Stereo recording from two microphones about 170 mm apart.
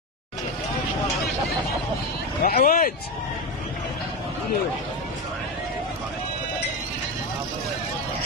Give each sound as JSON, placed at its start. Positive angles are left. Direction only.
{"t": 2.4, "sound": "speech", "side_deg": 60}